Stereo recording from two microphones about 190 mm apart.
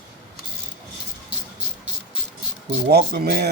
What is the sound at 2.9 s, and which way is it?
Speech, 60° right (ahead or behind).